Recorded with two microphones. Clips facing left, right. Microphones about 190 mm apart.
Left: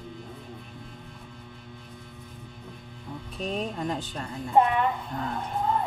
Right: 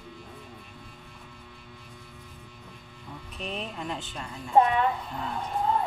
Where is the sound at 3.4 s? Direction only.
40° left (ahead or behind).